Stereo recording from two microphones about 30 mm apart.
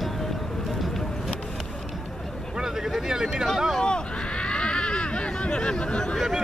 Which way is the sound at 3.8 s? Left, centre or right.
Left.